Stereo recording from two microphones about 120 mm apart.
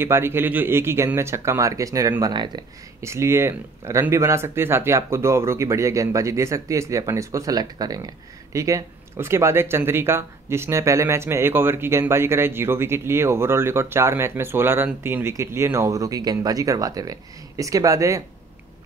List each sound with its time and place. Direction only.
0.0 s speech: 20° right (ahead or behind)
2.3 s speech: 40° right (ahead or behind)
3.0 s speech: 25° right (ahead or behind)